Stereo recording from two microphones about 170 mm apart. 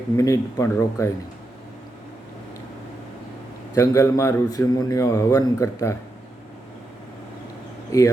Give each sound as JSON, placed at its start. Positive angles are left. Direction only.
{"t": 0.2, "sound": "speech", "side_deg": 20}
{"t": 3.8, "sound": "a man's voice", "side_deg": 20}
{"t": 7.9, "sound": "a man's voice", "side_deg": 20}